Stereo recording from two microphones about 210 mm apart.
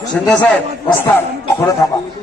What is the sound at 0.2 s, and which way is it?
Speech, centre (ahead or behind).